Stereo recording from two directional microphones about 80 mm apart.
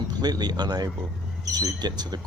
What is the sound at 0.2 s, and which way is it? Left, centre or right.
Speech, right.